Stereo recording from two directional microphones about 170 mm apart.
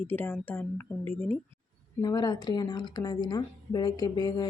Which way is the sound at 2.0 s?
25° left (ahead or behind).